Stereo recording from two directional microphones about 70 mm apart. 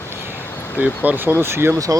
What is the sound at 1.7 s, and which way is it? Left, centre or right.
Speech, right.